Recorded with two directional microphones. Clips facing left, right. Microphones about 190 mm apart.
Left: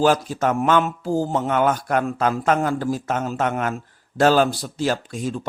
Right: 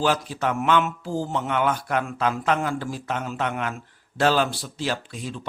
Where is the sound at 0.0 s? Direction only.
45° left (ahead or behind).